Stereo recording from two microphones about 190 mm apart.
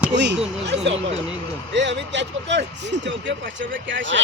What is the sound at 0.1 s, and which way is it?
Speech, 65° right (ahead or behind).